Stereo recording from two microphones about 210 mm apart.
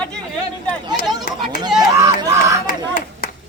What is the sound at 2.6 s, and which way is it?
Clapping, 45° left (ahead or behind).